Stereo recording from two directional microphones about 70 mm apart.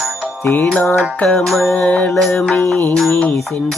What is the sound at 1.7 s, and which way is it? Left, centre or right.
Mantra, centre.